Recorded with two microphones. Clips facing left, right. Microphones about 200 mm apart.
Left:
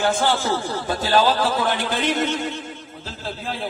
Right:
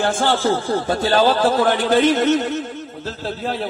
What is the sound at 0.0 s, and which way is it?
A man's voice, 50° right (ahead or behind).